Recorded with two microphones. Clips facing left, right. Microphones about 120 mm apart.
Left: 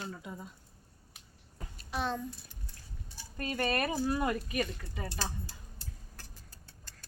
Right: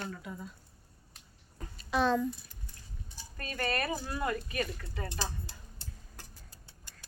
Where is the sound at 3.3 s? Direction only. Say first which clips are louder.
Left 2 dB; 20° left (ahead or behind).